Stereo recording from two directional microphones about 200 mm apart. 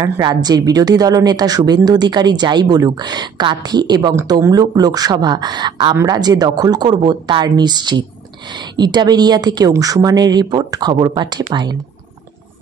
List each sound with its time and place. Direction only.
0.0 s a woman's voice: 20° right (ahead or behind)